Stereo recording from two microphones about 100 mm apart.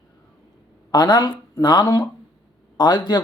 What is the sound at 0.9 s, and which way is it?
Speech, 45° left (ahead or behind).